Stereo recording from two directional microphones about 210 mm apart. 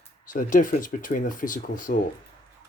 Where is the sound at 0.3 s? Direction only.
40° left (ahead or behind).